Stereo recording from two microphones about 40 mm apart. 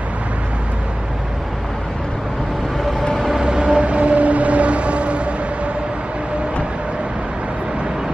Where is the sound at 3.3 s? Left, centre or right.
Right.